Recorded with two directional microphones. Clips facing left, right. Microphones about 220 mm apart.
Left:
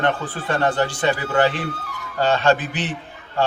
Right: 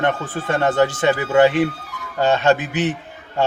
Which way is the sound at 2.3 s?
20° right (ahead or behind).